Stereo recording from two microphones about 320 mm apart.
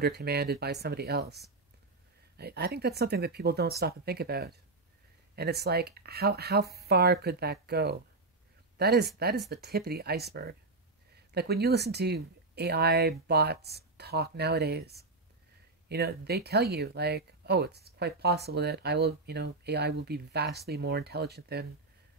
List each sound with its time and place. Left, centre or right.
0.0 s speech: right